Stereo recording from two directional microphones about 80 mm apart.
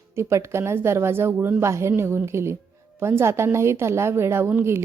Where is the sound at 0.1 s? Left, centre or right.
Right.